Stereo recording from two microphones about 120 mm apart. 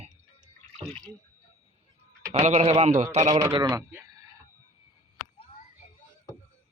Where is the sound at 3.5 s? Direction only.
35° right (ahead or behind).